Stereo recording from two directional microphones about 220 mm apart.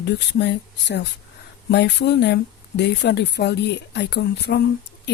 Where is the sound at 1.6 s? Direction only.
50° left (ahead or behind).